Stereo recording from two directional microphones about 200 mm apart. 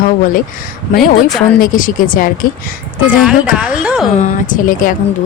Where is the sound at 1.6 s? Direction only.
40° left (ahead or behind).